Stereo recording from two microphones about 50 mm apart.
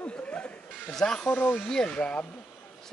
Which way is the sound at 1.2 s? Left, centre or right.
Left.